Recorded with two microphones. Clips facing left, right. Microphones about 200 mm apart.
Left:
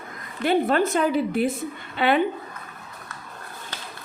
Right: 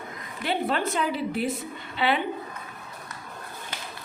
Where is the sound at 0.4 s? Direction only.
50° left (ahead or behind).